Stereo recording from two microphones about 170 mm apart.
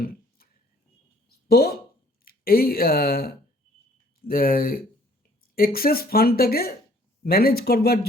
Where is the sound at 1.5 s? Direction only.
65° left (ahead or behind).